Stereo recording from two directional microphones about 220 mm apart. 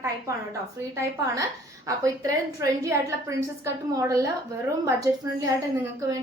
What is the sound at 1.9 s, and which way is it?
A woman's voice, 15° right (ahead or behind).